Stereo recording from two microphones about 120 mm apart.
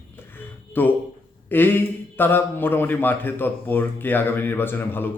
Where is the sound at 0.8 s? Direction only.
15° left (ahead or behind).